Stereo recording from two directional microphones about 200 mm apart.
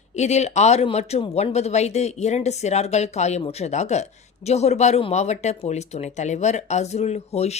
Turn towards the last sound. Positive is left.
turn(degrees=30)  # may be behind; listen again after turning